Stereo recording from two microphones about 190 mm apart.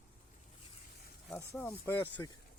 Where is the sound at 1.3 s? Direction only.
10° left (ahead or behind).